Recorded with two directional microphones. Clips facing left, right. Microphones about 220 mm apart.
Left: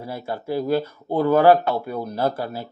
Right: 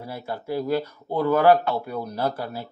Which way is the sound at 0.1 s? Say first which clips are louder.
Left 3 dB; 30° left (ahead or behind).